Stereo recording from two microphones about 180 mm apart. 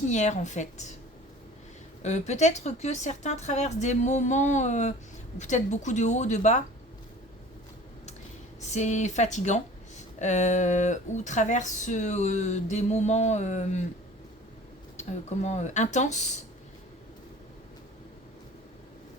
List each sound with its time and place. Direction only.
0.1 s speech: 40° left (ahead or behind)
2.0 s speech: 40° left (ahead or behind)
8.7 s speech: 40° left (ahead or behind)
14.9 s speech: 40° left (ahead or behind)